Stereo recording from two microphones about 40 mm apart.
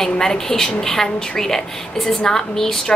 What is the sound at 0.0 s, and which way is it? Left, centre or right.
A woman's voice, centre.